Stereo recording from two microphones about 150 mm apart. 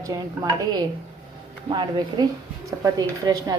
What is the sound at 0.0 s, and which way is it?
Speech, 25° right (ahead or behind).